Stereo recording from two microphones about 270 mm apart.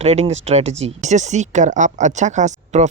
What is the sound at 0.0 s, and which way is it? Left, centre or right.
Speech, right.